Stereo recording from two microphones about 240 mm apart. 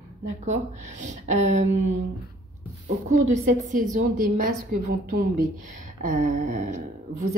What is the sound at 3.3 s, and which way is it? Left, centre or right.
A woman's voice, right.